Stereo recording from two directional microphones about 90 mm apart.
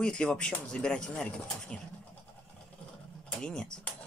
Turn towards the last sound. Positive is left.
turn(degrees=10)  # may be behind; listen again after turning